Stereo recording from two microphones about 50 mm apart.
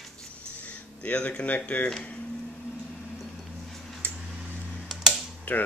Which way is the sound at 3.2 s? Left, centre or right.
Centre.